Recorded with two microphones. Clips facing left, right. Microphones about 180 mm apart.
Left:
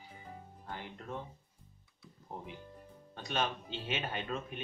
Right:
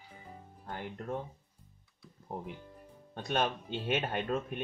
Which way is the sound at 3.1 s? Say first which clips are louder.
Right 4 dB; 50° right (ahead or behind).